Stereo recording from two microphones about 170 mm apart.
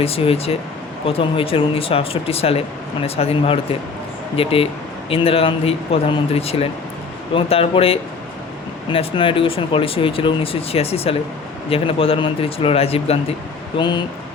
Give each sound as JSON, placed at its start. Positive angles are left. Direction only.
{"t": 0.0, "sound": "speech", "side_deg": 35}